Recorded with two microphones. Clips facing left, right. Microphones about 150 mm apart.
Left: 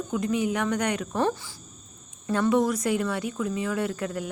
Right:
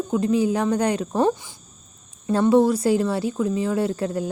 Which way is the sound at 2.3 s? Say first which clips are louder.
Right 6 dB; 30° right (ahead or behind).